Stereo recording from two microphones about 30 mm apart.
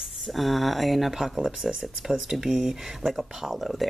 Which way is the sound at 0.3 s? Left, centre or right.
Centre.